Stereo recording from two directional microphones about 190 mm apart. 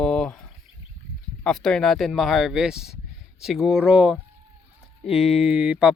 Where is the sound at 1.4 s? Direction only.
5° left (ahead or behind).